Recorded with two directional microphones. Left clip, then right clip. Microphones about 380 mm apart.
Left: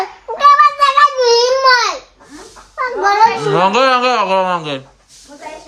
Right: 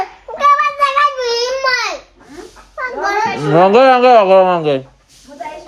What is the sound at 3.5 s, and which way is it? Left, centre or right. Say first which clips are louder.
Speech: right 8 dB; centre.